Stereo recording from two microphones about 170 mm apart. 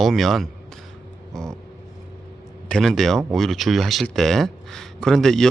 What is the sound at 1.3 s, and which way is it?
Vehicle, 5° left (ahead or behind).